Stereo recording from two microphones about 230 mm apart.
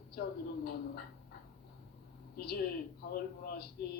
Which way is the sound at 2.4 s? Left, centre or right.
Left.